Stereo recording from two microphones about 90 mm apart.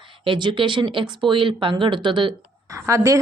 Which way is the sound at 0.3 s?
65° right (ahead or behind).